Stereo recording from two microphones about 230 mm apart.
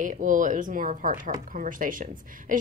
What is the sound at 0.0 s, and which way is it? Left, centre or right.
Speech, right.